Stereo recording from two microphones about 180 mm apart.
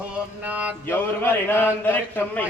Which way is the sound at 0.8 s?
10° left (ahead or behind).